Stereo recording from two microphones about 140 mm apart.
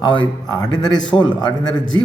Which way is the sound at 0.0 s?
35° left (ahead or behind).